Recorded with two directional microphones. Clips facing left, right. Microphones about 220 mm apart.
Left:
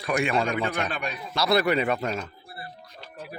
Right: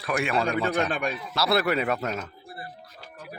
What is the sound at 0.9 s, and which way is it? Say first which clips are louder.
Speech: right 3 dB; 50° right (ahead or behind).